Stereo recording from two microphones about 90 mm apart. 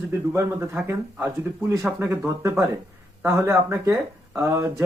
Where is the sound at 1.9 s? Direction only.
30° right (ahead or behind).